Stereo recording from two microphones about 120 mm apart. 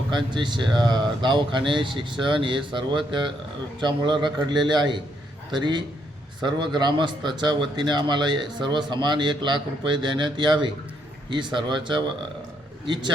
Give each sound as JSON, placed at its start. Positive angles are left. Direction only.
{"t": 0.1, "sound": "a man's voice", "side_deg": -40}